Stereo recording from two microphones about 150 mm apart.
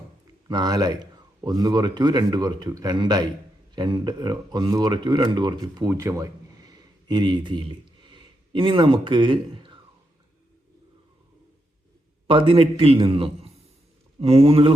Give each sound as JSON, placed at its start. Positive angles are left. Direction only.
{"t": 0.4, "sound": "a man's voice", "side_deg": -25}
{"t": 12.3, "sound": "a man's voice", "side_deg": -35}